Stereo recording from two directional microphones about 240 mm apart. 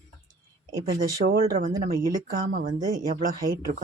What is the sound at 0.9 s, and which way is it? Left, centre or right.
Speech, right.